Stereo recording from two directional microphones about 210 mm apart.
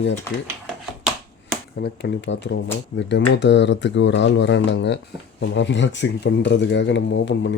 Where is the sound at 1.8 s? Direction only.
55° left (ahead or behind).